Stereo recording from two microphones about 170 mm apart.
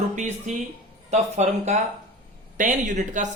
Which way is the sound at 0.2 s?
45° right (ahead or behind).